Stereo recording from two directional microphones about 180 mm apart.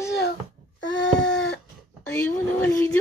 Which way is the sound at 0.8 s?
90° left.